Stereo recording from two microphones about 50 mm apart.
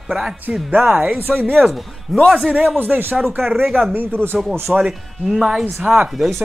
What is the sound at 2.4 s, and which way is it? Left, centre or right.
Speech, right.